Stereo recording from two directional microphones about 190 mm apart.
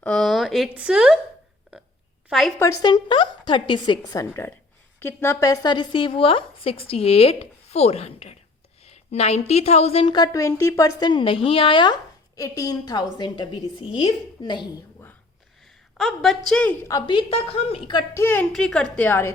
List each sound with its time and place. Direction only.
0.0 s speech: 5° left (ahead or behind)
1.7 s a sound: 5° right (ahead or behind)
2.6 s speech: 15° left (ahead or behind); by 8.4 s 30° left (ahead or behind)
8.8 s a sound: 35° left (ahead or behind)
9.5 s speech: 35° left (ahead or behind)
16.0 s a woman's voice: centre (ahead or behind)
16.9 s a woman's voice: 25° left (ahead or behind); by 19.3 s 10° left (ahead or behind)